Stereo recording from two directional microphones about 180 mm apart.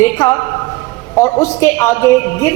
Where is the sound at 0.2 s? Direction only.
20° left (ahead or behind).